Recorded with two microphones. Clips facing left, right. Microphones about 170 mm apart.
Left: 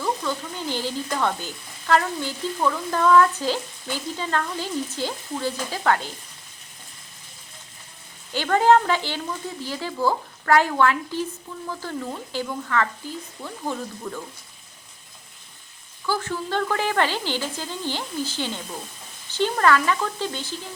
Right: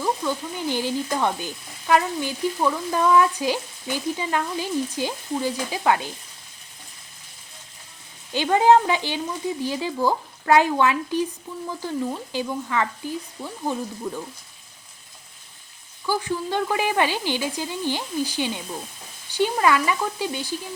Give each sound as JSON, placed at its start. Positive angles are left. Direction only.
{"t": 0.0, "sound": "frying", "side_deg": -15}
{"t": 8.3, "sound": "frying", "side_deg": -15}
{"t": 16.0, "sound": "frying", "side_deg": -15}